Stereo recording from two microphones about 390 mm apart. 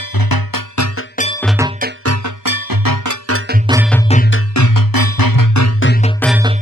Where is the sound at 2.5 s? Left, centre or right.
Right.